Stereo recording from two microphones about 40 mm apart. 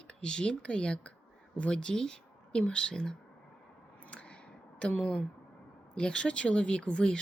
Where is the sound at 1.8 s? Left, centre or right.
Centre.